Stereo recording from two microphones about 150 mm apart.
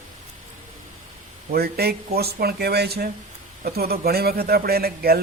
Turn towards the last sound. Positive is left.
turn(degrees=-90)